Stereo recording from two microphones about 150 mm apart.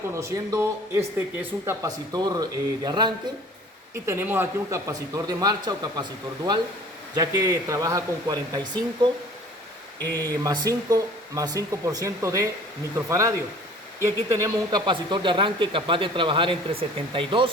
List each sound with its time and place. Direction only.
0.1 s speech: 20° right (ahead or behind)
2.1 s speech: 25° right (ahead or behind)
4.0 s speech: 15° right (ahead or behind)
10.2 s speech: 25° right (ahead or behind)
14.8 s speech: 30° right (ahead or behind)